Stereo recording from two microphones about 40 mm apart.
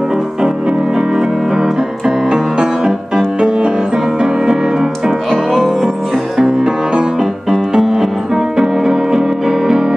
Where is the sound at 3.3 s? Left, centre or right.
Right; by 5.8 s centre.